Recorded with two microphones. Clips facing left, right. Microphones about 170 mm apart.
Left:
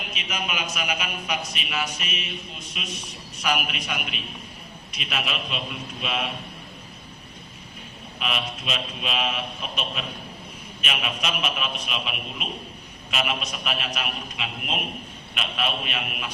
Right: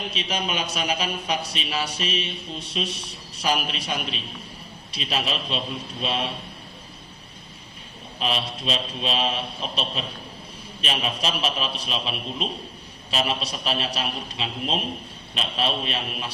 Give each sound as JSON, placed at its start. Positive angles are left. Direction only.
{"t": 0.1, "sound": "a man's voice", "side_deg": -30}
{"t": 8.2, "sound": "a man's voice", "side_deg": -35}